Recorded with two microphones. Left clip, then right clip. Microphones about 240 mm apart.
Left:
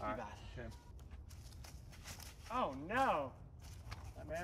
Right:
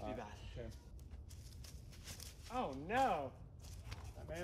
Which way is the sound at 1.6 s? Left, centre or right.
Centre.